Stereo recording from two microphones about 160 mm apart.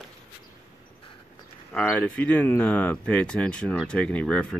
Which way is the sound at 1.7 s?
10° left (ahead or behind).